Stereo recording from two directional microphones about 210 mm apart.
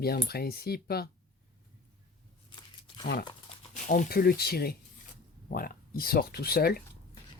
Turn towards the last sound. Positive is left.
turn(degrees=45)  # may be behind; listen again after turning